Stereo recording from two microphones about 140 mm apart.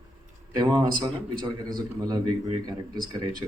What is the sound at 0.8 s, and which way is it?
A man's voice, 30° right (ahead or behind).